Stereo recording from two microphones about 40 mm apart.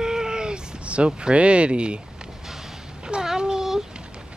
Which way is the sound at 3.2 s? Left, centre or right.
Centre.